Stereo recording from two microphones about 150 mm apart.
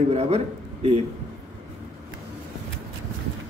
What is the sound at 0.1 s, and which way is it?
Speech, 45° right (ahead or behind).